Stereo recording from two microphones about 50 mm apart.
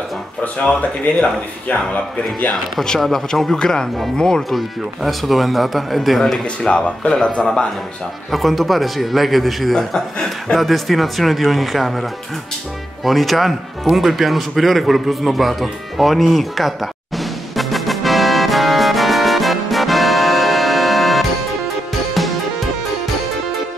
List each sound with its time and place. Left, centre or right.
0.4 s speech: left
3.0 s a man's voice: centre
4.4 s a man's voice: centre
6.6 s speech: centre
8.3 s a man's voice: centre
13.8 s music: centre